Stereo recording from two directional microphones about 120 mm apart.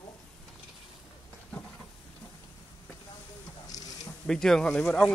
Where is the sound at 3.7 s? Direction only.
30° left (ahead or behind).